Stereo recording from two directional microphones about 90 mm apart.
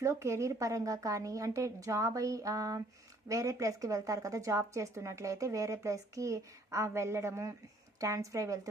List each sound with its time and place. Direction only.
0.0 s speech: 35° right (ahead or behind)